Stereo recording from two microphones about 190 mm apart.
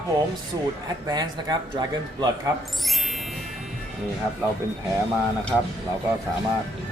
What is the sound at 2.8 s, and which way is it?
Music, centre (ahead or behind).